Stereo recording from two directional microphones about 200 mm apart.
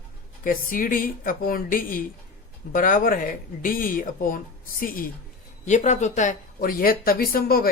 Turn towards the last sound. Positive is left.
turn(degrees=50)  # may be behind; listen again after turning